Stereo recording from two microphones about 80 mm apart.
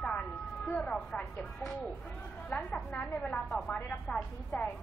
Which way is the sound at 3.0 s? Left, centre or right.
Centre.